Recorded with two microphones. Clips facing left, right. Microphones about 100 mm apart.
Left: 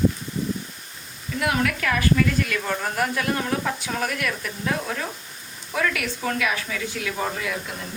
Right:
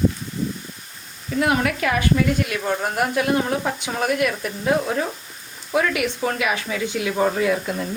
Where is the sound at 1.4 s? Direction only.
25° right (ahead or behind).